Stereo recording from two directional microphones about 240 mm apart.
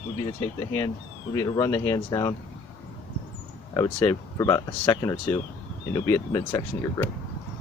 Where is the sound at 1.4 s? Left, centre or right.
Centre.